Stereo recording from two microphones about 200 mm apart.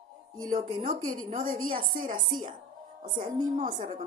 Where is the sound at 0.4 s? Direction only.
40° right (ahead or behind).